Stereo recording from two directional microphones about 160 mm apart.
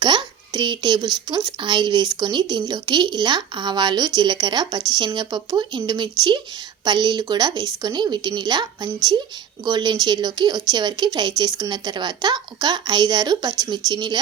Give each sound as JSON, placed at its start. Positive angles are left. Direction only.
{"t": 0.0, "sound": "speech", "side_deg": -30}